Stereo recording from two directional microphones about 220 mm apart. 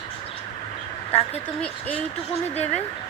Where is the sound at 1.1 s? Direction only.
30° left (ahead or behind).